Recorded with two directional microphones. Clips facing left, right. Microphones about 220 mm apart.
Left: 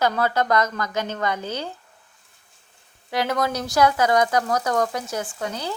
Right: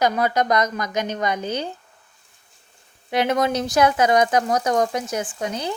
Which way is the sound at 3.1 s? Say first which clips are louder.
Right 3 dB; 20° right (ahead or behind).